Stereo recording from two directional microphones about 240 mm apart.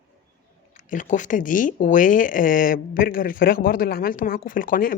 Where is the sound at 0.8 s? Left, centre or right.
Left.